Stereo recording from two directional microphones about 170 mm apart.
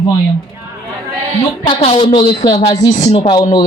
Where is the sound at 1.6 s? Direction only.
30° left (ahead or behind).